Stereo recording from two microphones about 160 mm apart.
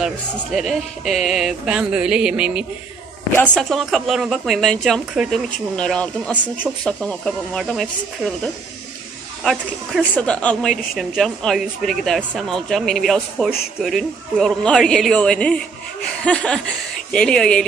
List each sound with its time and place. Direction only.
0.0 s speech: centre (ahead or behind)
3.6 s speech: centre (ahead or behind)
9.4 s speech: centre (ahead or behind)